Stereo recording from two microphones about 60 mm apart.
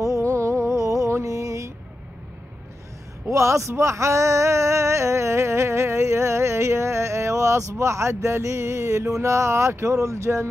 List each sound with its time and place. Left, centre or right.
0.0 s music: right
3.3 s speech: right
7.8 s a sound: right